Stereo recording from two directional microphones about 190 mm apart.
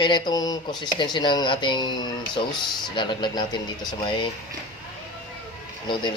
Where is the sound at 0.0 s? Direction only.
25° left (ahead or behind).